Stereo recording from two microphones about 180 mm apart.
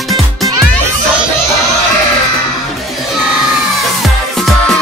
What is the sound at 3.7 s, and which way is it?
Music, centre (ahead or behind).